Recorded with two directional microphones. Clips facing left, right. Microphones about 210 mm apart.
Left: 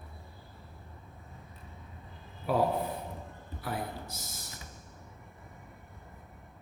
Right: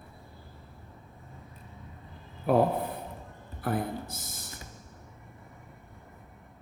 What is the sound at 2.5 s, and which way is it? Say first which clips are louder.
Speech: right 6 dB; 50° right (ahead or behind).